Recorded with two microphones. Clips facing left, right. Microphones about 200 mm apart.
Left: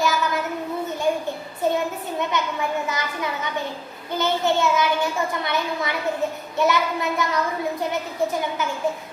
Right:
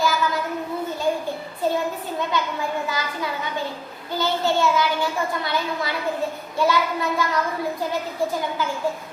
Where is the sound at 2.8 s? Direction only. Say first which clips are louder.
Even; 20° left (ahead or behind).